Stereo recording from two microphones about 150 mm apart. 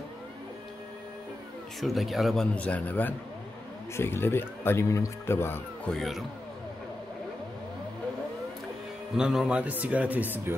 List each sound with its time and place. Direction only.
1.8 s speech: centre (ahead or behind); by 5.6 s 15° left (ahead or behind)
5.9 s speech: centre (ahead or behind)
9.1 s speech: 5° right (ahead or behind)